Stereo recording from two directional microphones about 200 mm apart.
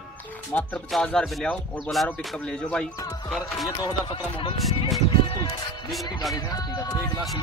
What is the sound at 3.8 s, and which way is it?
Speech, 25° left (ahead or behind).